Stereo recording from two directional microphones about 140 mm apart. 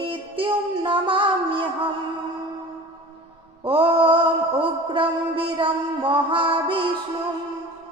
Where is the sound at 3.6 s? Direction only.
40° right (ahead or behind).